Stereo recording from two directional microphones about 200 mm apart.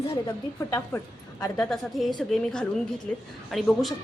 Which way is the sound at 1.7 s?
Centre (ahead or behind).